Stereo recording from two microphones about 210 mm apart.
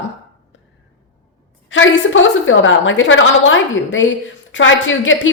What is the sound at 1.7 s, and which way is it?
A woman's voice, 65° left (ahead or behind).